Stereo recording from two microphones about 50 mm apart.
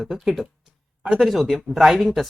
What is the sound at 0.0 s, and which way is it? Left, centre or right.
Speech, centre.